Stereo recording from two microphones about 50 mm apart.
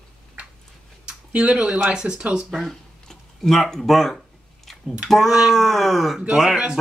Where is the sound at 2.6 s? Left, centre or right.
Centre.